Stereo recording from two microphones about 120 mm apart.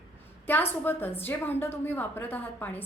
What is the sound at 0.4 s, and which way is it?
A woman's voice, 15° left (ahead or behind).